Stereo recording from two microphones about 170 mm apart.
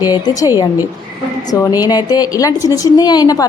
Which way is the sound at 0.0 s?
20° left (ahead or behind).